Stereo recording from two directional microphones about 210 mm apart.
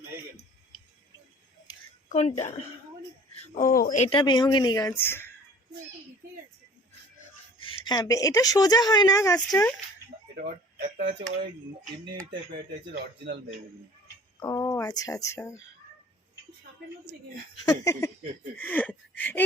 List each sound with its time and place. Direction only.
2.0 s a woman's voice: 35° left (ahead or behind); by 5.3 s 10° left (ahead or behind)
7.6 s speech: 20° left (ahead or behind)
10.3 s speech: 45° right (ahead or behind)
12.9 s speech: 55° right (ahead or behind)
14.3 s speech: 15° left (ahead or behind)
17.7 s speech: 15° left (ahead or behind)